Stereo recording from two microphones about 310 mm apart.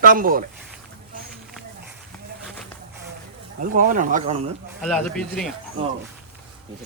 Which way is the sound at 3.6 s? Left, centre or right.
Right.